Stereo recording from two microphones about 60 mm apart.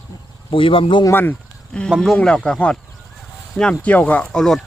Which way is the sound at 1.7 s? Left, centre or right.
Centre.